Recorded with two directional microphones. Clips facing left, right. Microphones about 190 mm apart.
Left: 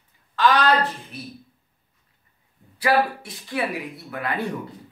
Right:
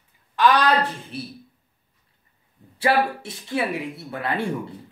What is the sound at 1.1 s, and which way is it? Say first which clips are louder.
Speech: right 4 dB; 30° right (ahead or behind).